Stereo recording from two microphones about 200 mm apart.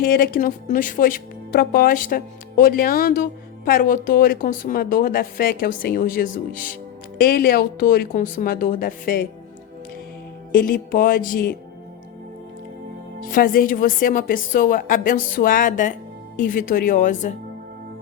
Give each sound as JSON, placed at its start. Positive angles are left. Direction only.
{"t": 0.0, "sound": "speech", "side_deg": 45}
{"t": 10.5, "sound": "speech", "side_deg": 45}
{"t": 13.2, "sound": "speech", "side_deg": 45}